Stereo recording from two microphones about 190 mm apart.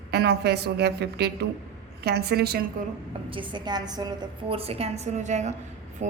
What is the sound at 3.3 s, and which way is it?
A woman's voice, 25° right (ahead or behind).